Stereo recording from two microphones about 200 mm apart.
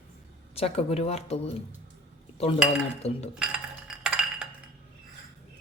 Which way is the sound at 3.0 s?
35° left (ahead or behind).